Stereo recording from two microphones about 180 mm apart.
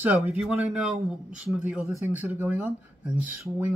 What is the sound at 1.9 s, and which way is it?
Speech, 15° right (ahead or behind).